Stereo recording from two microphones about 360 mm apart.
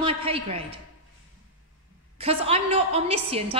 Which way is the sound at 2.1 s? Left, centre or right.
Centre.